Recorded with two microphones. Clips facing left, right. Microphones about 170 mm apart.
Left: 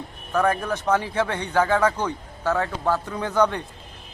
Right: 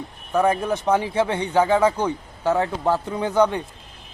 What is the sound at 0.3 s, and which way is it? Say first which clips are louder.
Speech: right 2 dB; 15° right (ahead or behind).